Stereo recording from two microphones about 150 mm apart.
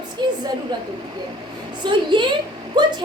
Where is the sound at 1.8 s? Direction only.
30° right (ahead or behind).